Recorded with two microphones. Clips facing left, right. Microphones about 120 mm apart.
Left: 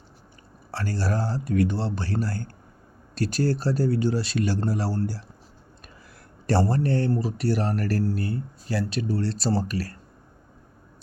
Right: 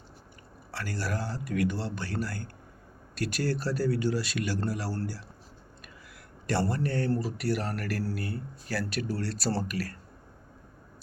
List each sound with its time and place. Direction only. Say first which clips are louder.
0.7 s speech: left 6 dB; 30° left (ahead or behind)
6.5 s speech: left 6 dB; 35° left (ahead or behind)